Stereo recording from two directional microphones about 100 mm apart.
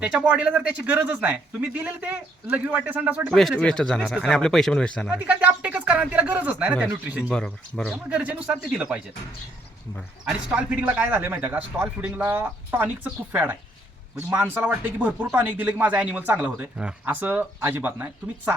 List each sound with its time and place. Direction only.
0.0 s speech: 10° right (ahead or behind)
3.6 s speech: 10° left (ahead or behind)
5.1 s speech: 15° right (ahead or behind)
7.3 s speech: 10° left (ahead or behind)
8.1 s speech: 15° right (ahead or behind)
10.5 s speech: 15° right (ahead or behind)